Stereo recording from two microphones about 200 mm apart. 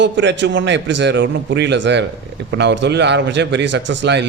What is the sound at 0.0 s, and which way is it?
A man's voice, 65° right (ahead or behind).